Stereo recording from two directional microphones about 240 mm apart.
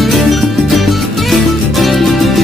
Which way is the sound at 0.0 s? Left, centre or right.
Centre.